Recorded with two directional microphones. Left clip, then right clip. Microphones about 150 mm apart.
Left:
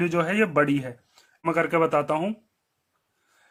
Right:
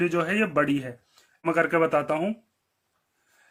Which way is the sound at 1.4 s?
15° left (ahead or behind).